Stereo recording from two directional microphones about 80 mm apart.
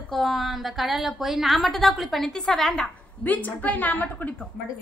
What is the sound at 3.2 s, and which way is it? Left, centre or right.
A woman's voice, left.